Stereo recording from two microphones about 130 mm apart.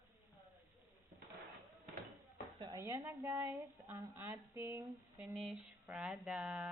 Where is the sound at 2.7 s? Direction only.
20° right (ahead or behind).